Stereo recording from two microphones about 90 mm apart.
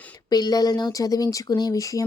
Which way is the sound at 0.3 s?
50° left (ahead or behind).